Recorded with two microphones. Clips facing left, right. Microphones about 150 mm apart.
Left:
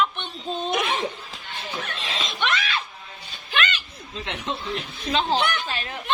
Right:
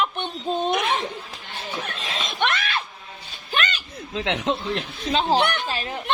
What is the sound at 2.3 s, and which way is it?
Screaming, 55° right (ahead or behind).